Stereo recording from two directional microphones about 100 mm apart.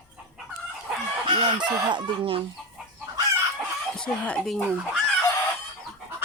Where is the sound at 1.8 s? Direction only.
50° right (ahead or behind).